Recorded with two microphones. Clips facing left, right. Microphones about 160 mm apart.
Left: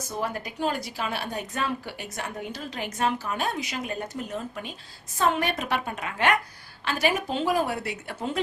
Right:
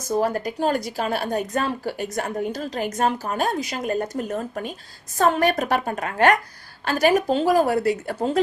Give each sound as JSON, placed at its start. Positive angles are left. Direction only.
{"t": 0.1, "sound": "a woman's voice", "side_deg": -40}